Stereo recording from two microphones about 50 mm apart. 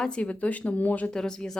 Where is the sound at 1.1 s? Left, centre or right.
Centre.